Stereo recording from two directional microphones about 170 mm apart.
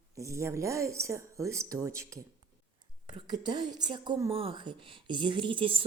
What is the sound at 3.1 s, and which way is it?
Whispering, 25° right (ahead or behind).